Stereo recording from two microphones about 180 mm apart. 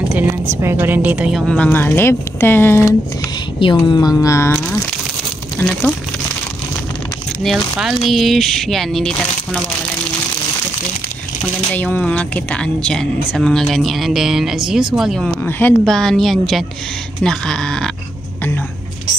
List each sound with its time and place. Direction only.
0.1 s speech: 10° right (ahead or behind)
1.5 s speech: 10° left (ahead or behind)
3.8 s a sound: 20° left (ahead or behind)
5.6 s speech: 5° left (ahead or behind)
7.4 s speech: centre (ahead or behind)
11.7 s speech: 10° left (ahead or behind)